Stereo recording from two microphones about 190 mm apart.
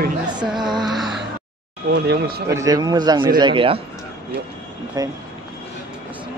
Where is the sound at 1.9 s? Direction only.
55° right (ahead or behind).